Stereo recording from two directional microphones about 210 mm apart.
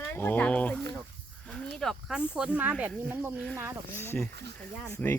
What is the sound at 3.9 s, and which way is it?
Speech, 10° left (ahead or behind).